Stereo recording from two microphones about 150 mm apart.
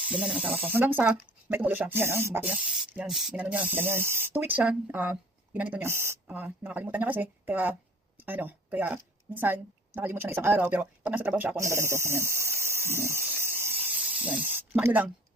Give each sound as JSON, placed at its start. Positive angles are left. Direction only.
{"t": 0.1, "sound": "a woman's voice", "side_deg": -5}